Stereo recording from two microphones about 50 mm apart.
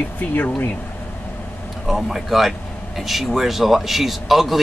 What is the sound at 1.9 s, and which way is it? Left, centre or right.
A man's voice, centre.